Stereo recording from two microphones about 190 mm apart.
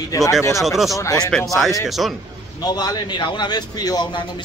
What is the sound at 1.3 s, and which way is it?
Speech, centre (ahead or behind).